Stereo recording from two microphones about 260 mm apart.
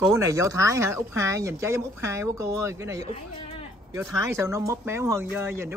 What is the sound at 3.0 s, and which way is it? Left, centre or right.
Speech, left.